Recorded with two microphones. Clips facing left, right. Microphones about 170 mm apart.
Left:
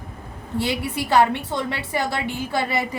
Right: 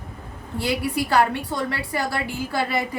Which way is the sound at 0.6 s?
25° left (ahead or behind).